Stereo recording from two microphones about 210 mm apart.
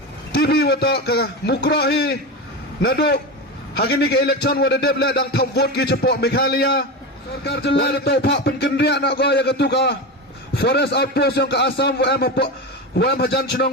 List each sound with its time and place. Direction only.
0.3 s a man's voice: 50° left (ahead or behind)